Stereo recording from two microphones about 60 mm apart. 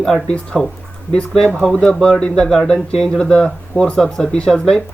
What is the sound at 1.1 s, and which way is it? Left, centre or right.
Speech, centre.